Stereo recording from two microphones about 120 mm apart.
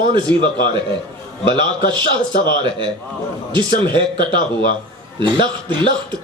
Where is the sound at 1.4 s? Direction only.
40° right (ahead or behind).